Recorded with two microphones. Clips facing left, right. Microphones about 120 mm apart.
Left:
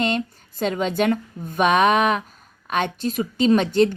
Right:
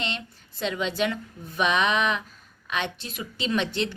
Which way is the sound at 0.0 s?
45° left (ahead or behind).